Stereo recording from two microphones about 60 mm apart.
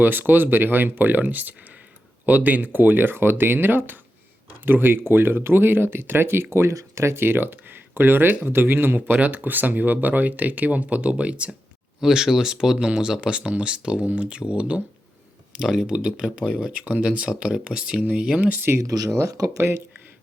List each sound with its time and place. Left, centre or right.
0.0 s speech: right
11.9 s speech: centre
15.6 s speech: centre
18.3 s speech: right
18.8 s speech: right
19.1 s speech: right